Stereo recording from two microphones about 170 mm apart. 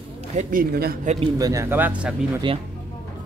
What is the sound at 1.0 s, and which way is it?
Speech, 40° right (ahead or behind).